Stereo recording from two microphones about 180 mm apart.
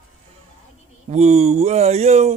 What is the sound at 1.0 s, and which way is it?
Speech, 40° right (ahead or behind).